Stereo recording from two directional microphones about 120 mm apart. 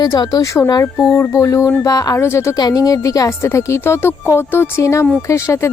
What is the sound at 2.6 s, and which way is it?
A woman's voice, 35° left (ahead or behind).